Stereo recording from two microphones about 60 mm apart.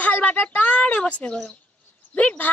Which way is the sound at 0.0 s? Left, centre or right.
Left.